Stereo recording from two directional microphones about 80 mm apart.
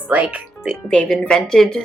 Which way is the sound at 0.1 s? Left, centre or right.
Centre.